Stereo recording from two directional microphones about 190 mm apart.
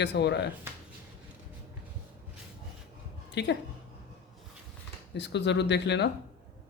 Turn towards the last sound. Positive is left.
turn(degrees=65)  # may be behind; listen again after turning